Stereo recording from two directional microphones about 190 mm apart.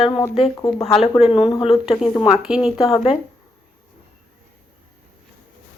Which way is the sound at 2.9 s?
30° left (ahead or behind).